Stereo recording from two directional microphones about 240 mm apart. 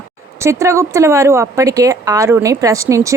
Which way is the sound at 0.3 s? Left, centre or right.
Centre.